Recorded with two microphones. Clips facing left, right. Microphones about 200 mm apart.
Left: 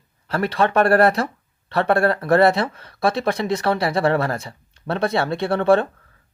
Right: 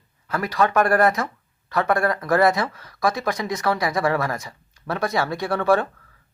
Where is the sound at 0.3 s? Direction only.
30° left (ahead or behind).